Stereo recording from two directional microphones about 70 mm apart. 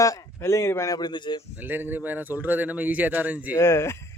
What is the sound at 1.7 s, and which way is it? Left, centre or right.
A man's voice, right.